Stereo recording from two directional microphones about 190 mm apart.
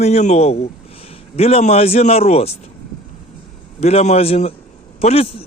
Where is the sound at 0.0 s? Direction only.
35° left (ahead or behind).